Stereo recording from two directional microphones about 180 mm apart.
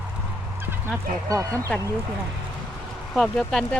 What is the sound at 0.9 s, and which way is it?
Speech, 15° right (ahead or behind).